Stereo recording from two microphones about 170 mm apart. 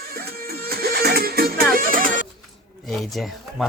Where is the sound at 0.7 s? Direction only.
65° right (ahead or behind).